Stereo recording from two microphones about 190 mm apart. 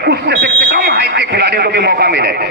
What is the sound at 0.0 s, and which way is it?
Speech, 60° right (ahead or behind).